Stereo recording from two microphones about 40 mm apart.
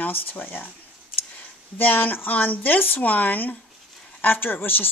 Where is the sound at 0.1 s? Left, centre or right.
Left.